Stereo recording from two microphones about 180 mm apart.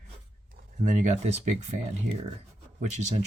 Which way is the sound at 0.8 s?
40° right (ahead or behind).